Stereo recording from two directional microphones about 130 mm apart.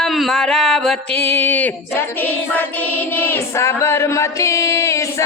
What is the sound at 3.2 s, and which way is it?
Music, 20° left (ahead or behind).